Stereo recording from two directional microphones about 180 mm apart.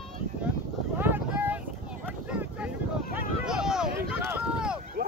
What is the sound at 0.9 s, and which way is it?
Boat, 10° right (ahead or behind).